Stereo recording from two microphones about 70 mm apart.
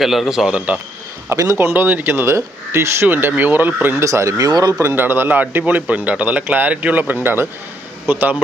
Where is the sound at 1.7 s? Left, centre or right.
Right.